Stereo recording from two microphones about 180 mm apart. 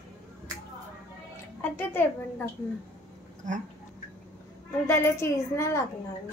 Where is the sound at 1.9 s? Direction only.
10° left (ahead or behind).